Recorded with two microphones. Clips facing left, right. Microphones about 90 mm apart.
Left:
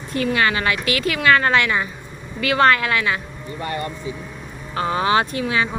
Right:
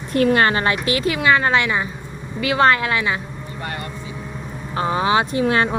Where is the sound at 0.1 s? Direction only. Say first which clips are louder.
Right 4 dB; 50° right (ahead or behind); by 3.2 s 20° right (ahead or behind).